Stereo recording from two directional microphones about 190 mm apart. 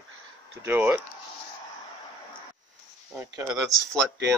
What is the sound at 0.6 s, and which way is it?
Speech, 10° right (ahead or behind).